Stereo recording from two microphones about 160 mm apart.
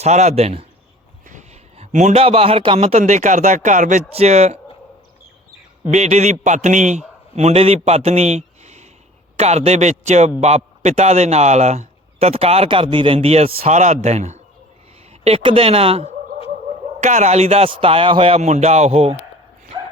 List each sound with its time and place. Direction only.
0.0 s a man's voice: 45° right (ahead or behind)
5.9 s a man's voice: 45° right (ahead or behind)
15.2 s a man's voice: 35° right (ahead or behind)